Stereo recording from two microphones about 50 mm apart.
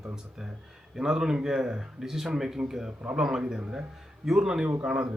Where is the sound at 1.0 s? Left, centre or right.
Centre.